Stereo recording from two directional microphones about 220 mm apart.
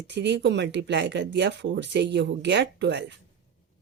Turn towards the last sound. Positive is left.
turn(degrees=-50)  # may be behind; listen again after turning